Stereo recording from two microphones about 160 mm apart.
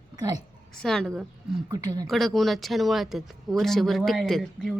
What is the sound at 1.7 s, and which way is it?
Speech, 25° right (ahead or behind).